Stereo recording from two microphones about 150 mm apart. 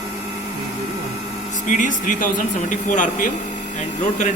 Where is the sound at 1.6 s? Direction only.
60° left (ahead or behind).